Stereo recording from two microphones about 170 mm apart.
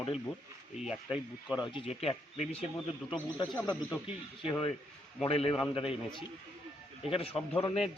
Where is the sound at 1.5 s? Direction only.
30° left (ahead or behind).